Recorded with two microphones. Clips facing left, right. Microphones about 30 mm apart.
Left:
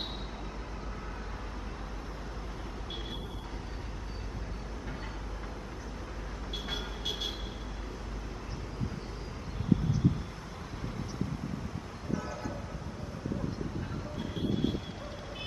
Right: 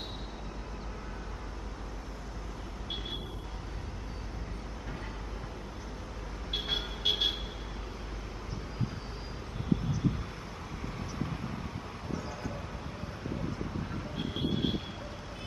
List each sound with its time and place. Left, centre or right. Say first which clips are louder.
6.5 s vehicle: right 5 dB; right
12.1 s vehicle: left 3 dB; centre
14.1 s vehicle: even; right